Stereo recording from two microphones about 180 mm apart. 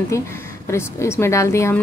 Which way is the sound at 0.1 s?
15° left (ahead or behind).